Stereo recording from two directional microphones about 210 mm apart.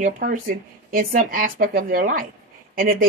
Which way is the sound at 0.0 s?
40° right (ahead or behind).